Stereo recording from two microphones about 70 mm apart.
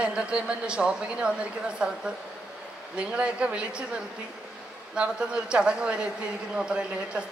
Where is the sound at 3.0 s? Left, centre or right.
Centre.